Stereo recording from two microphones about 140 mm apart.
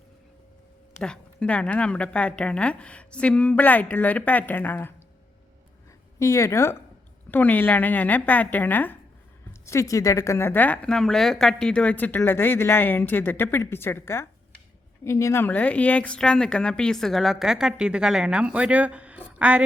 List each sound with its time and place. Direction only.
0.9 s speech: 5° left (ahead or behind)
6.1 s a woman's voice: 20° left (ahead or behind); by 19.6 s 10° right (ahead or behind)